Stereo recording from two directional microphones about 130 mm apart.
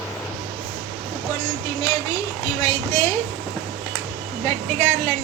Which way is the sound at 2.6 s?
25° left (ahead or behind).